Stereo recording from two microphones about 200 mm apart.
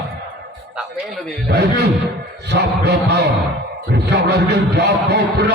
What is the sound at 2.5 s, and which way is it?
A man's voice, 55° right (ahead or behind).